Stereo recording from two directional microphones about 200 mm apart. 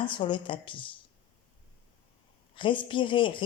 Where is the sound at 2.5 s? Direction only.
25° left (ahead or behind).